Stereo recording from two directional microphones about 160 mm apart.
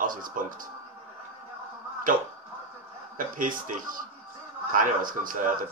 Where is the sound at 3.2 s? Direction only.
55° right (ahead or behind).